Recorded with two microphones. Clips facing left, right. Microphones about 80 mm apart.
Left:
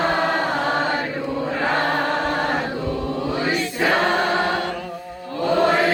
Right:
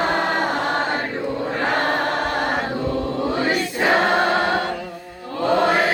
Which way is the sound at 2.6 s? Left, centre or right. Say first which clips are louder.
Right 2 dB; right.